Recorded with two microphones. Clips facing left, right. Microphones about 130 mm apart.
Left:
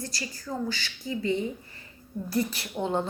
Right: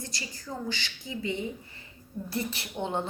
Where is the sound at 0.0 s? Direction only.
20° right (ahead or behind).